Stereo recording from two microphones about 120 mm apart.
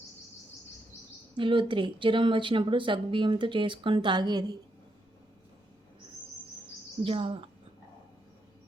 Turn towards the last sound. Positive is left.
turn(degrees=-50)  # may be behind; listen again after turning